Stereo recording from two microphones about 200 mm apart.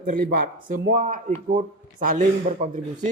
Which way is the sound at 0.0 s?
45° right (ahead or behind).